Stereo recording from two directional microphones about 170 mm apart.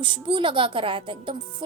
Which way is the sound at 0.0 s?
30° right (ahead or behind).